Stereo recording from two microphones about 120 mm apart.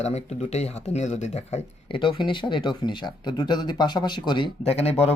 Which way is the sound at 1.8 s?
45° left (ahead or behind).